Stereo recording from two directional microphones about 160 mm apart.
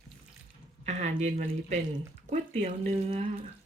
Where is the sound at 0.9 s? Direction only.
45° right (ahead or behind).